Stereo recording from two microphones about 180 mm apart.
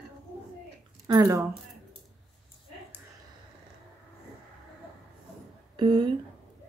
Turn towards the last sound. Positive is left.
turn(degrees=-25)  # may be behind; listen again after turning